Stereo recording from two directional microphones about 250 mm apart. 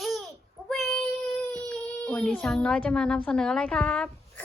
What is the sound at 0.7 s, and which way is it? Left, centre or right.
Child singing, centre.